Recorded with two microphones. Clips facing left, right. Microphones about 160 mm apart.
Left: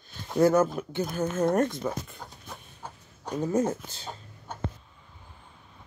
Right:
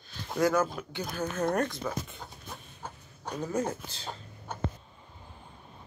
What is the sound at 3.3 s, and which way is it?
Speech, 20° left (ahead or behind).